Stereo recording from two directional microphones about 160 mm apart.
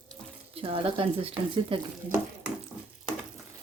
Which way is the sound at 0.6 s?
35° right (ahead or behind).